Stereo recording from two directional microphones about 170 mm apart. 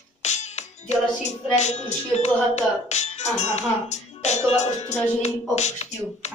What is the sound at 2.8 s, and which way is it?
Speech, 40° left (ahead or behind).